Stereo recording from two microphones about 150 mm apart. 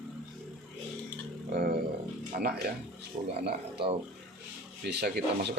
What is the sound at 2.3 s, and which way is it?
Speech, 90° right.